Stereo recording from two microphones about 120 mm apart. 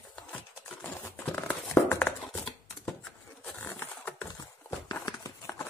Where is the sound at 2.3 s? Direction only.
5° left (ahead or behind).